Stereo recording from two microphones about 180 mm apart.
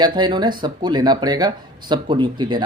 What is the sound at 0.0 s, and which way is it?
Speech, 25° right (ahead or behind).